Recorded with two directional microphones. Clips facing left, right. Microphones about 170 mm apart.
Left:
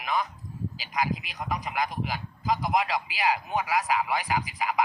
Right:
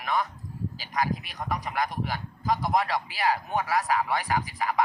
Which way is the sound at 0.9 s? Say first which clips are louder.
Right 1 dB; 20° left (ahead or behind).